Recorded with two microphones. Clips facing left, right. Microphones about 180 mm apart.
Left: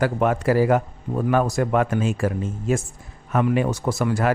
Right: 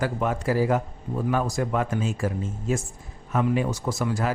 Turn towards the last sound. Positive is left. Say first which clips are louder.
# left 4 dB
turn(degrees=65)  # may be behind; listen again after turning